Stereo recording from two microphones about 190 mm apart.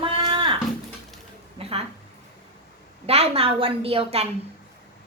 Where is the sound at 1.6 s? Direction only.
30° right (ahead or behind).